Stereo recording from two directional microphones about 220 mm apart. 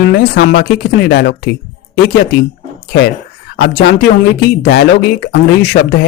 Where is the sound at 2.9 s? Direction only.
45° left (ahead or behind).